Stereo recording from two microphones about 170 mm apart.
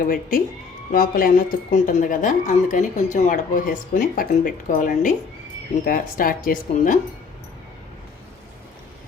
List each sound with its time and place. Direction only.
0.0 s speech: 55° left (ahead or behind)